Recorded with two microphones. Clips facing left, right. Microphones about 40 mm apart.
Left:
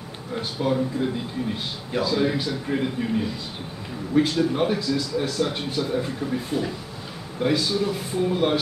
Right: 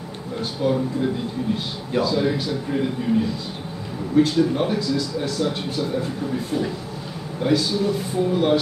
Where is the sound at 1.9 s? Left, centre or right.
Centre.